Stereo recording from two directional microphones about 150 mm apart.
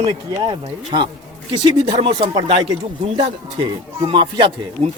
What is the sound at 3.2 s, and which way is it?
Speech, 35° right (ahead or behind).